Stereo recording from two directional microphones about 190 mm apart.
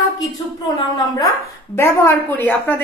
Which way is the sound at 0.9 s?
20° left (ahead or behind).